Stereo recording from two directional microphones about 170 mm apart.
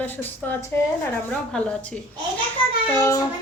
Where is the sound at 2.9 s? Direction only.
15° left (ahead or behind).